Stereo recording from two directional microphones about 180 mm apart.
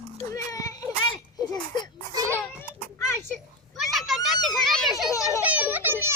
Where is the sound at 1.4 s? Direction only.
25° left (ahead or behind).